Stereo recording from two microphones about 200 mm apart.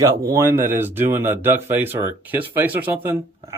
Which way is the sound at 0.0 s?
15° right (ahead or behind).